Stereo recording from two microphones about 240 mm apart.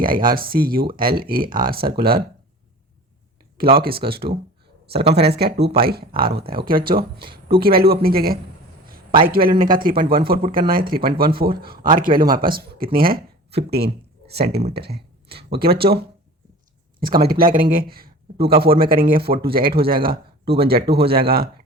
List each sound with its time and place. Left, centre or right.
0.0 s speech: right
3.6 s speech: right
17.0 s speech: right